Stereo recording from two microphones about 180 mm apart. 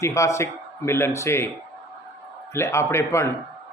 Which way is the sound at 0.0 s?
15° left (ahead or behind).